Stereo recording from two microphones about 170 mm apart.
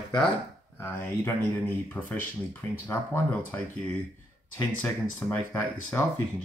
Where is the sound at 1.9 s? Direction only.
10° left (ahead or behind).